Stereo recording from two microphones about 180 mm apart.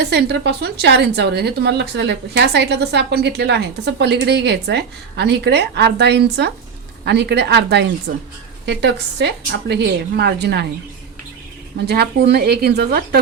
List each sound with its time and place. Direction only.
0.0 s a woman's voice: 70° right (ahead or behind)
8.1 s speech: 55° right (ahead or behind)
8.6 s a woman's voice: 70° right (ahead or behind)
11.9 s speech: 65° right (ahead or behind)